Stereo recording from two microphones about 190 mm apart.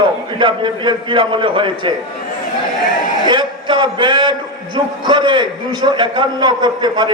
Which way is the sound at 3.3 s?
25° right (ahead or behind).